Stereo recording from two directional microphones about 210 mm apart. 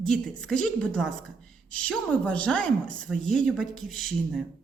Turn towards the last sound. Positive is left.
turn(degrees=0)  # may be behind; listen again after turning